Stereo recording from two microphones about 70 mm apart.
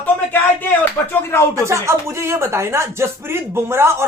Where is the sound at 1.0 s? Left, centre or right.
Left.